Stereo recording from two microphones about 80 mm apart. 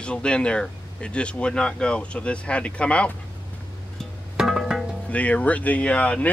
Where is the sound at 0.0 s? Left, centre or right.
Centre.